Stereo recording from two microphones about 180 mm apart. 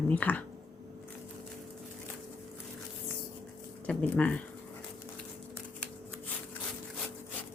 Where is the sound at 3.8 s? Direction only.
5° left (ahead or behind).